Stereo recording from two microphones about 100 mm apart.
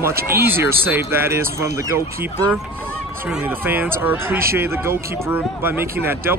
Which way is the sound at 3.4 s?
20° right (ahead or behind).